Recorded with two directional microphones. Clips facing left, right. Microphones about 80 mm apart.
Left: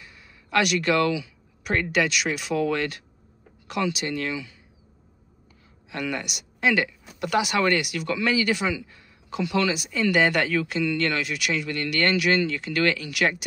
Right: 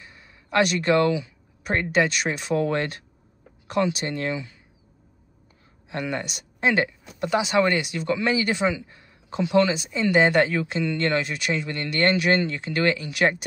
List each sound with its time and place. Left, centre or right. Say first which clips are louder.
0.0 s a sound: right 1 dB; right
1.2 s speech: right 2 dB; right
5.9 s speech: right 1 dB; right